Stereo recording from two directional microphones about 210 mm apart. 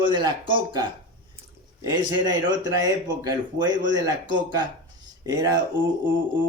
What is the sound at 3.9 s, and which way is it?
Speech, 20° right (ahead or behind).